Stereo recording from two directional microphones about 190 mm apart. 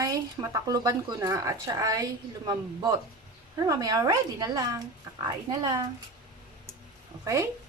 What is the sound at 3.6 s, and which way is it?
Speech, 20° right (ahead or behind).